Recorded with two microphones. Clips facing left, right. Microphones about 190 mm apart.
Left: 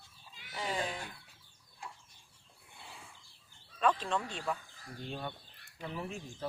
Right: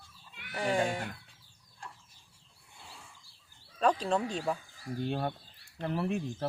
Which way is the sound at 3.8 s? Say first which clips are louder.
Right 4 dB; 40° right (ahead or behind).